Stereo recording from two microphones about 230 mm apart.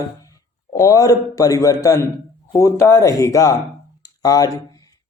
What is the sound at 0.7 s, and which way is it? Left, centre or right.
A man's voice, centre.